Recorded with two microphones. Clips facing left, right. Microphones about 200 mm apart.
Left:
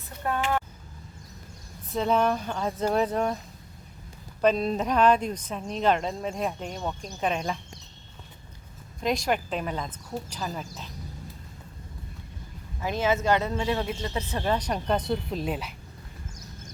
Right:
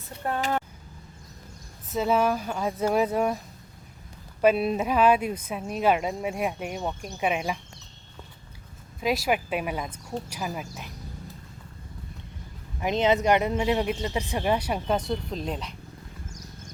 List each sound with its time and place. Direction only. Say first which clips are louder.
0.3 s vehicle: even; 35° right (ahead or behind)
1.9 s speech: right 1 dB; 5° right (ahead or behind)
4.4 s speech: right 2 dB; 10° right (ahead or behind)
9.0 s speech: right 1 dB; 5° right (ahead or behind)
12.8 s speech: right 3 dB; 20° right (ahead or behind); by 15.7 s 5° left (ahead or behind)